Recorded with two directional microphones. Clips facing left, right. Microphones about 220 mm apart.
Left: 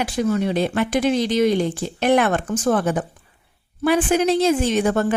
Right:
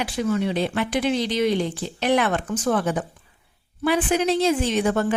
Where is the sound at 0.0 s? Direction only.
45° left (ahead or behind).